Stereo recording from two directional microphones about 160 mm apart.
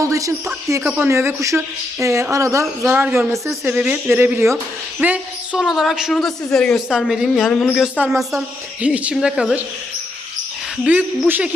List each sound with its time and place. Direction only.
0.0 s speech: 20° right (ahead or behind); by 7.9 s 5° left (ahead or behind)
7.9 s speech: 10° right (ahead or behind)
10.8 s speech: 10° right (ahead or behind)